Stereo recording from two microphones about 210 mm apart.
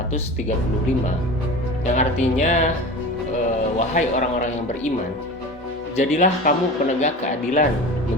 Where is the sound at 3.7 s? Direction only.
35° left (ahead or behind).